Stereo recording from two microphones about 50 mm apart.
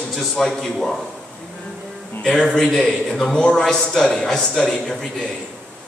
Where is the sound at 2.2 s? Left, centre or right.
Centre.